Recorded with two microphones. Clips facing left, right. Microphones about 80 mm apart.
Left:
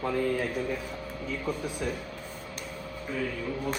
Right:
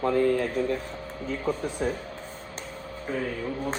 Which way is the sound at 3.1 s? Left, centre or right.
Right.